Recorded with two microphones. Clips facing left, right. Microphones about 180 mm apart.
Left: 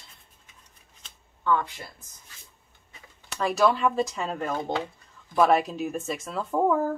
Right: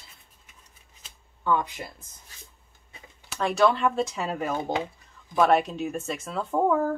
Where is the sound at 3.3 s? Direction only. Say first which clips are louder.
Right 1 dB; centre (ahead or behind).